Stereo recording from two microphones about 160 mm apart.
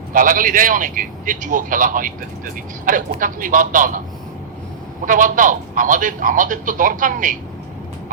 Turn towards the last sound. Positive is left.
turn(degrees=-55)  # may be behind; listen again after turning